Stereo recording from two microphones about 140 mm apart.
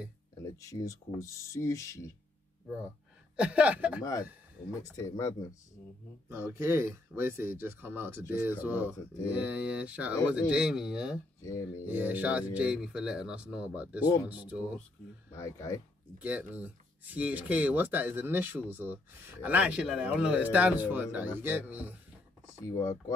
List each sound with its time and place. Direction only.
0.4 s speech: 25° left (ahead or behind)
3.3 s speech: 10° right (ahead or behind)
4.0 s speech: 25° left (ahead or behind)
6.2 s speech: 15° right (ahead or behind)
11.4 s speech: 25° left (ahead or behind)
11.8 s speech: 15° right (ahead or behind)
15.3 s speech: 25° left (ahead or behind)
16.2 s speech: 10° right (ahead or behind)
22.8 s speech: 25° left (ahead or behind)